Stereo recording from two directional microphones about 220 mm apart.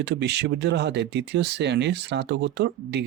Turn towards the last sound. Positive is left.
turn(degrees=-50)  # may be behind; listen again after turning